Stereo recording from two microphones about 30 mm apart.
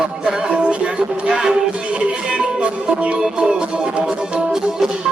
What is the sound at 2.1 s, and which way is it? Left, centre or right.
Music, right.